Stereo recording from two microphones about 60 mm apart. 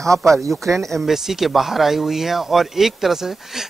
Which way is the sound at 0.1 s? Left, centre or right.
Right.